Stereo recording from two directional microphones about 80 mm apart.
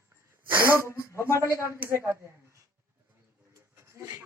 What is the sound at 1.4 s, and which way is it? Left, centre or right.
Speech, right.